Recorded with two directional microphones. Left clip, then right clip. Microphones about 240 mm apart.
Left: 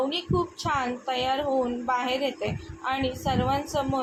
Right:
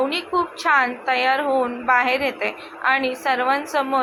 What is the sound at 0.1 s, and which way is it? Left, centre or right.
A woman's voice, centre.